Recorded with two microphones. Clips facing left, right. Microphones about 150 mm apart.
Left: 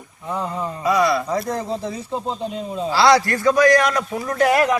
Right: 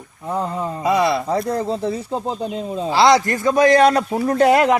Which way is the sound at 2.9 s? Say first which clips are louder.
Right 1 dB; 20° right (ahead or behind).